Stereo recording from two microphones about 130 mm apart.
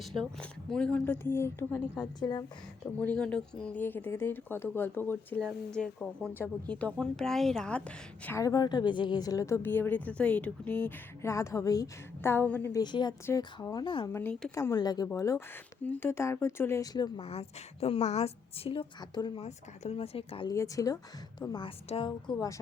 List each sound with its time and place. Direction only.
0.0 s a woman's voice: centre (ahead or behind); by 2.0 s 20° left (ahead or behind)
3.0 s speech: 10° left (ahead or behind)
5.4 s a woman's voice: 5° left (ahead or behind)
8.4 s a woman's voice: 30° left (ahead or behind); by 12.7 s 15° left (ahead or behind)
12.7 s speech: 35° left (ahead or behind)
14.1 s a woman's voice: 15° left (ahead or behind)
17.2 s a woman's voice: 50° left (ahead or behind)
19.4 s a woman's voice: 55° left (ahead or behind)
20.5 s a woman's voice: 25° left (ahead or behind); by 22.4 s 40° left (ahead or behind)